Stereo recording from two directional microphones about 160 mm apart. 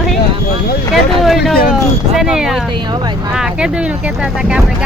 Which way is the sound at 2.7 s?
30° right (ahead or behind).